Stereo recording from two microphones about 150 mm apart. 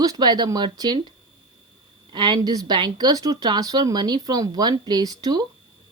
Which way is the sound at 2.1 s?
30° right (ahead or behind).